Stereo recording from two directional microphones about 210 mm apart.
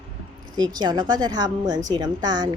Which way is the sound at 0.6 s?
20° right (ahead or behind).